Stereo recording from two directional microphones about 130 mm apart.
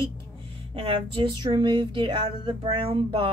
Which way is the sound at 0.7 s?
45° right (ahead or behind).